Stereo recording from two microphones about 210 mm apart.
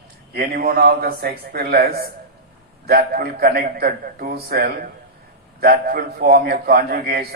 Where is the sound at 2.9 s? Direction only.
45° right (ahead or behind).